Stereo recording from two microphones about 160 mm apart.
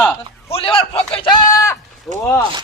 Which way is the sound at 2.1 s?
Centre (ahead or behind).